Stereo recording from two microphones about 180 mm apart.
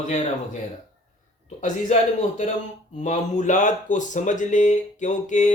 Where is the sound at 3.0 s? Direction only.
40° left (ahead or behind).